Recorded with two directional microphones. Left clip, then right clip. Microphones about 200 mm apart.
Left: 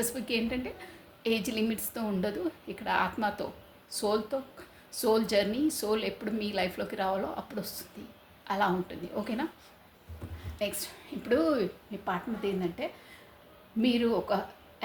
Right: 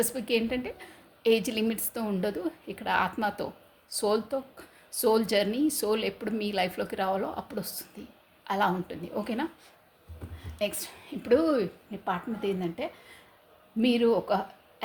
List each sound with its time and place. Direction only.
0.0 s a woman's voice: 50° right (ahead or behind)
10.6 s a woman's voice: 50° right (ahead or behind)